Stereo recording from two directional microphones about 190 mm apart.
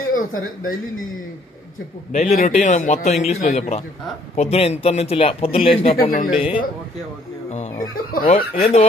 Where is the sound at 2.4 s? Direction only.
40° left (ahead or behind).